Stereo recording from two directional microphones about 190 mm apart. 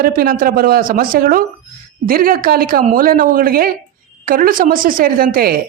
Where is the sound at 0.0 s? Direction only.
50° right (ahead or behind).